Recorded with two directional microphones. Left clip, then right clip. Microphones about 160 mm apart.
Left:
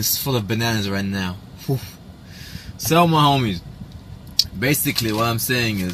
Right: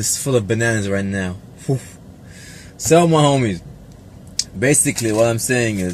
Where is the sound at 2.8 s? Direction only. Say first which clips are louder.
Right 2 dB; 10° right (ahead or behind).